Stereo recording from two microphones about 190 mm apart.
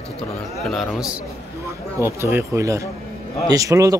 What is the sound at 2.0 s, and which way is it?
Speech, 10° right (ahead or behind).